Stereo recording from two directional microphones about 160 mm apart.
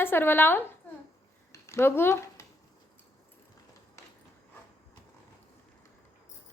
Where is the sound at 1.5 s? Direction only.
15° left (ahead or behind).